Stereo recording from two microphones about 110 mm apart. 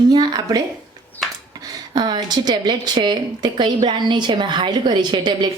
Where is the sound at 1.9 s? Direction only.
40° right (ahead or behind).